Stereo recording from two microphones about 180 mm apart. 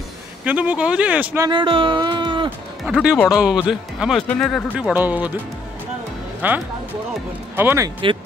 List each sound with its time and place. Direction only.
0.5 s speech: 10° right (ahead or behind)
1.5 s speech: 30° right (ahead or behind)
2.8 s speech: 5° right (ahead or behind)
4.9 s speech: 10° right (ahead or behind)
6.4 s speech: 10° right (ahead or behind)